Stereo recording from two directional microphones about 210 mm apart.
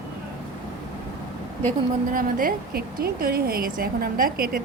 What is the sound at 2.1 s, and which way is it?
A woman's voice, 40° right (ahead or behind).